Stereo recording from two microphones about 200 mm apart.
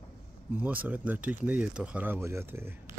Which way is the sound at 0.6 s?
10° right (ahead or behind).